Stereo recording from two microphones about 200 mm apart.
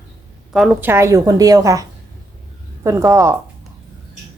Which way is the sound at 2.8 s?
15° right (ahead or behind).